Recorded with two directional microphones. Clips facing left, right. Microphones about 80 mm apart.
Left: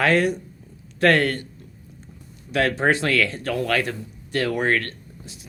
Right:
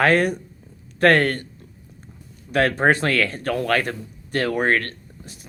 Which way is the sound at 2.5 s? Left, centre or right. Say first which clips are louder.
Right 2 dB; right.